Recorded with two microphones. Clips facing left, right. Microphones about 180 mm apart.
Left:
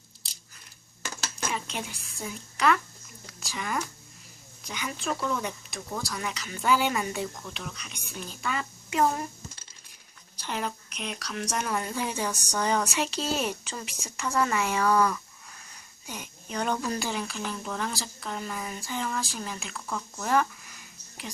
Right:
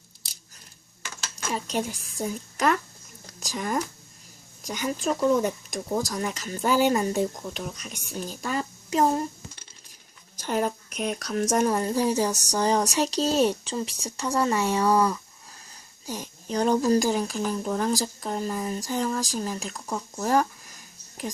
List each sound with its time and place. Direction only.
1.5 s a woman's voice: 40° right (ahead or behind)
10.3 s speech: 45° right (ahead or behind)